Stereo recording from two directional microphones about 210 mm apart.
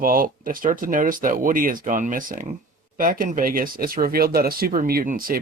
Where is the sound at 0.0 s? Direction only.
40° right (ahead or behind).